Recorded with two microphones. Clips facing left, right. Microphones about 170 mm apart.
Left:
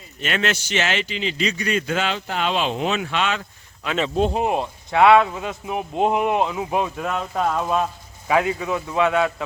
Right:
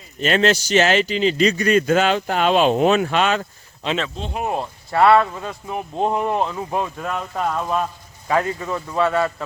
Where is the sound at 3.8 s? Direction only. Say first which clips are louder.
Right 3 dB; 30° right (ahead or behind).